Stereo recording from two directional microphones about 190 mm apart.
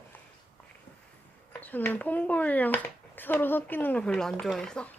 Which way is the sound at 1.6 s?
10° left (ahead or behind).